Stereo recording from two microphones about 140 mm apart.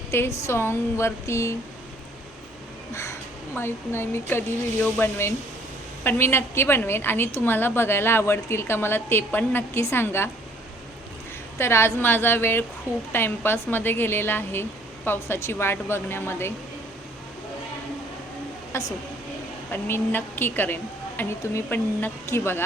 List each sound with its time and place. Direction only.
0.1 s speech: 20° left (ahead or behind)
2.9 s a woman's voice: 20° left (ahead or behind)
11.5 s a woman's voice: 20° left (ahead or behind)
18.7 s a woman's voice: 25° left (ahead or behind)